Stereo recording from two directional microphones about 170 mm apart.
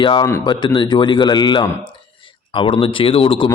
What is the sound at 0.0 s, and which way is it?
Speech, 30° left (ahead or behind).